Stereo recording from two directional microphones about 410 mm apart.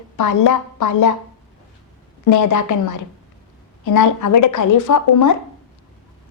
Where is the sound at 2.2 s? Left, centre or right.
Left.